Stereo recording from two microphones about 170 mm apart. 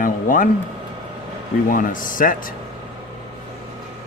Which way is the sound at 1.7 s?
55° left (ahead or behind).